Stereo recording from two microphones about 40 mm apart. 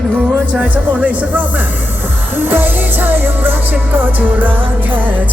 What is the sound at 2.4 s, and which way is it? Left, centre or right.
Music, right.